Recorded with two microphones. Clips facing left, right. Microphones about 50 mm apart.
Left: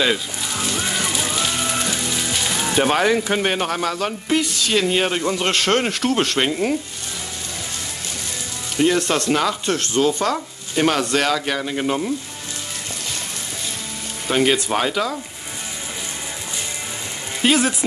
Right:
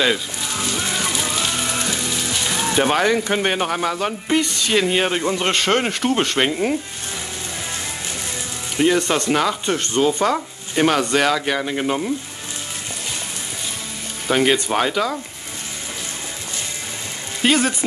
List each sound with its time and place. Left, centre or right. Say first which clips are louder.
0.0 s speech: right 1 dB; centre
1.1 s music: even; centre
2.0 s speech: even; centre
8.7 s speech: right 1 dB; centre
14.2 s speech: right 1 dB; centre
17.4 s speech: even; centre